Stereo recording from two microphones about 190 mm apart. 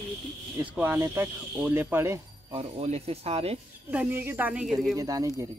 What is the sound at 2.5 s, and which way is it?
Speech, 30° right (ahead or behind).